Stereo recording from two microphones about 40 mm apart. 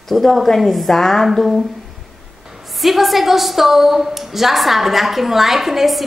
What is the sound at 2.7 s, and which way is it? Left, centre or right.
Speech, centre.